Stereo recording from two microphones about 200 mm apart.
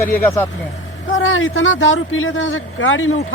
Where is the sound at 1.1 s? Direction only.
75° left (ahead or behind).